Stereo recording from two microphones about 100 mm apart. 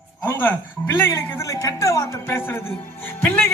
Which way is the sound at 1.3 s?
35° left (ahead or behind).